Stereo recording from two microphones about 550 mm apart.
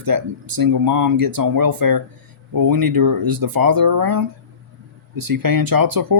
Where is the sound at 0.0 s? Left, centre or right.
Right.